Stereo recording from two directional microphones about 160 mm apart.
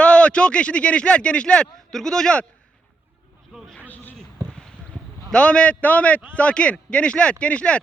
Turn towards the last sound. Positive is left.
turn(degrees=5)  # may be behind; listen again after turning